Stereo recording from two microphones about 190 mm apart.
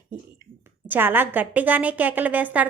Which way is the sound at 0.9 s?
10° right (ahead or behind).